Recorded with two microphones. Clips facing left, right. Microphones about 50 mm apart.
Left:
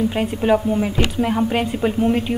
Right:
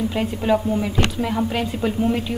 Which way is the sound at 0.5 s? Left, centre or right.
Centre.